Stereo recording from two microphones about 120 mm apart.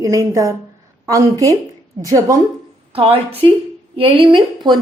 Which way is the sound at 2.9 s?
50° right (ahead or behind).